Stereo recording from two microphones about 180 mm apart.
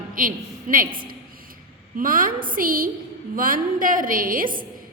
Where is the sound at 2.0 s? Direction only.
50° right (ahead or behind).